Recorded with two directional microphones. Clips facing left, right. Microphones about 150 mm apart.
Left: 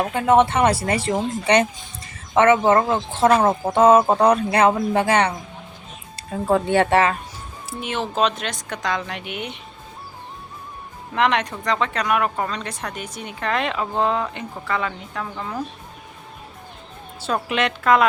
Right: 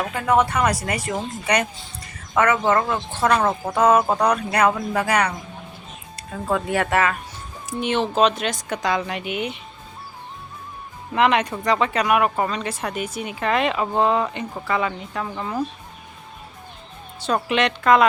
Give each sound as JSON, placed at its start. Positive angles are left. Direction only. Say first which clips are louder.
{"t": 0.0, "sound": "speech", "louder": "left 3 dB", "side_deg": 25}
{"t": 7.8, "sound": "speech", "louder": "right 3 dB", "side_deg": 0}
{"t": 11.1, "sound": "speech", "louder": "right 2 dB", "side_deg": -5}
{"t": 17.2, "sound": "speech", "louder": "right 2 dB", "side_deg": 5}